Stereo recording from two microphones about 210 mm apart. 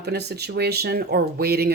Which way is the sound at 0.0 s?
50° right (ahead or behind).